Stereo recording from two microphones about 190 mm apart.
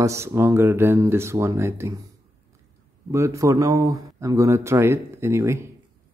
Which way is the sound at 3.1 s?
15° right (ahead or behind).